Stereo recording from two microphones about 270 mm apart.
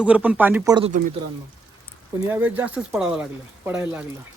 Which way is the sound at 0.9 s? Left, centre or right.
Right.